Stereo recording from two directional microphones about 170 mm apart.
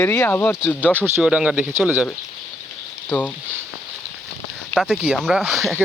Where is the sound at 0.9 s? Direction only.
15° right (ahead or behind).